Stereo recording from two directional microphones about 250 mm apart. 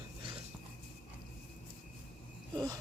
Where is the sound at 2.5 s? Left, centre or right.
Centre.